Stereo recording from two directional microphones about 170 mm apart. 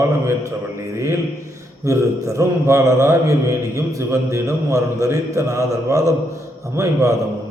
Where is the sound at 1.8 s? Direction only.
15° right (ahead or behind).